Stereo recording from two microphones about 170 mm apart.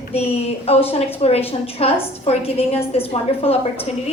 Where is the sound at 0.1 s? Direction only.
35° left (ahead or behind).